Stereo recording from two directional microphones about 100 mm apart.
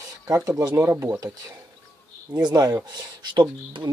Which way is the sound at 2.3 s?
40° right (ahead or behind).